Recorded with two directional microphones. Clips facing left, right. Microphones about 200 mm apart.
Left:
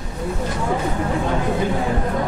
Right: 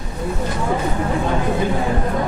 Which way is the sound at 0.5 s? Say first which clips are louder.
Right 1 dB; 25° right (ahead or behind).